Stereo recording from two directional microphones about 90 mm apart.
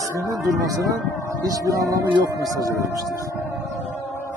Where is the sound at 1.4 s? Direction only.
40° right (ahead or behind).